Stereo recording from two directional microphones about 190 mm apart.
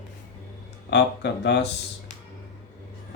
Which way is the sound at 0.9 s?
65° left (ahead or behind).